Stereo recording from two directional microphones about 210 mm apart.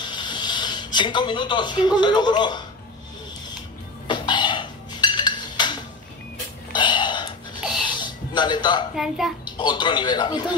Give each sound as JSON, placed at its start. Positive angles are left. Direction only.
{"t": 0.0, "sound": "speech", "side_deg": 20}
{"t": 4.1, "sound": "a sound", "side_deg": 20}
{"t": 6.7, "sound": "burping", "side_deg": 20}
{"t": 7.9, "sound": "music", "side_deg": 20}
{"t": 8.9, "sound": "a child's voice", "side_deg": 0}
{"t": 9.6, "sound": "speech", "side_deg": 20}